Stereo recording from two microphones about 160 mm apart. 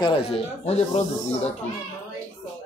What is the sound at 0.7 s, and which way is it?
Speech, 45° left (ahead or behind).